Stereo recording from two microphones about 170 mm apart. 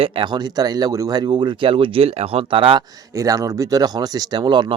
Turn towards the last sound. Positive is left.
turn(degrees=-25)  # may be behind; listen again after turning